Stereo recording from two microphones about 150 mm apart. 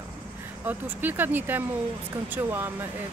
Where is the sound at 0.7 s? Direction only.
10° right (ahead or behind).